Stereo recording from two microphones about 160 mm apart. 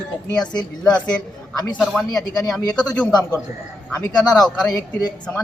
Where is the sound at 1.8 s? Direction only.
Centre (ahead or behind).